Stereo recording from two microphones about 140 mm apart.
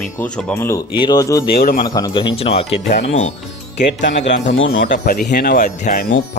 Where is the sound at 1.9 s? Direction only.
25° left (ahead or behind); by 2.7 s 45° left (ahead or behind).